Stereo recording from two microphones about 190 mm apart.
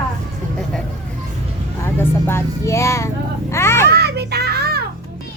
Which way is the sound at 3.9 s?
60° right (ahead or behind).